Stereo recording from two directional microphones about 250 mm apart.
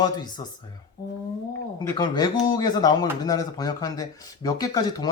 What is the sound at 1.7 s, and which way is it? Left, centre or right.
Speech, centre.